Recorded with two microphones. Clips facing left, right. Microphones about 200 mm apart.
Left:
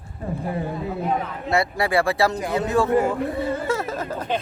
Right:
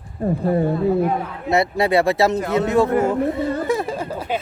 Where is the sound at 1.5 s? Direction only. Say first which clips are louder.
Right 4 dB; 20° right (ahead or behind).